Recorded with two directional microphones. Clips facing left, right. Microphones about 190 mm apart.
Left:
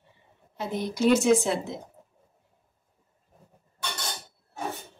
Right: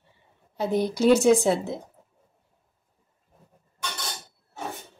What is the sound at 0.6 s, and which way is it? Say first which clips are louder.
Speech: right 5 dB; 35° right (ahead or behind).